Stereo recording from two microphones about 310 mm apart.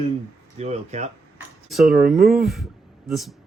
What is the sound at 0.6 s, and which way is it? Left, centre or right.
Speech, right.